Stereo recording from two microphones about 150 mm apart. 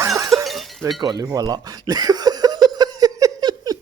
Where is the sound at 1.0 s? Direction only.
25° right (ahead or behind).